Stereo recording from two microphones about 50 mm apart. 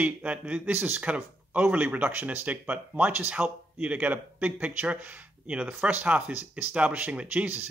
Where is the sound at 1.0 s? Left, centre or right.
Right.